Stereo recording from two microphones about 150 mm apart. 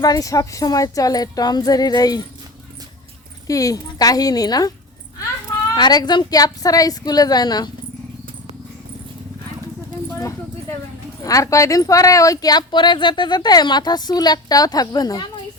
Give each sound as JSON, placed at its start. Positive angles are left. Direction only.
{"t": 0.0, "sound": "speech", "side_deg": 25}
{"t": 3.4, "sound": "speech", "side_deg": 25}
{"t": 5.7, "sound": "speech", "side_deg": 30}
{"t": 11.2, "sound": "speech", "side_deg": 25}